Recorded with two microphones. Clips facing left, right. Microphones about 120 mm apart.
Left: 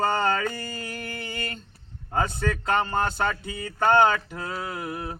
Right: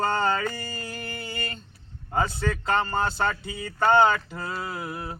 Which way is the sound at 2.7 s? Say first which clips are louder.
Even; 15° left (ahead or behind).